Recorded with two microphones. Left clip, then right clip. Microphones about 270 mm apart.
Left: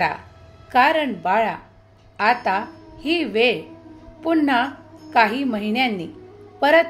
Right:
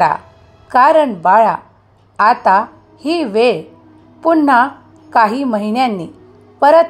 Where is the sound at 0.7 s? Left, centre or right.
Centre.